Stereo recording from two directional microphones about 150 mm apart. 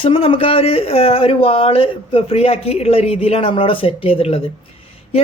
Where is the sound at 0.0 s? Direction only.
35° left (ahead or behind).